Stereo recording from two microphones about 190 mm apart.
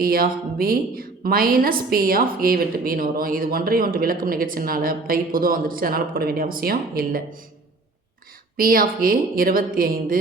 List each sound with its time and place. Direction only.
0.0 s a woman's voice: 50° right (ahead or behind)
8.5 s a woman's voice: 50° right (ahead or behind)